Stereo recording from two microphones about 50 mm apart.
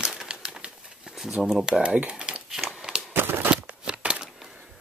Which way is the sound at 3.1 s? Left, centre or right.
Right.